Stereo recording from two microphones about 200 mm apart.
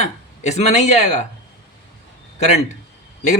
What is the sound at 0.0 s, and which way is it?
Speech, 35° left (ahead or behind).